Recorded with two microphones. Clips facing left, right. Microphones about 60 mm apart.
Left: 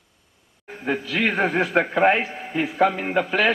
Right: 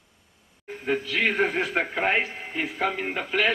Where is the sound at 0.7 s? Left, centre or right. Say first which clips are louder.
Left 1 dB; left.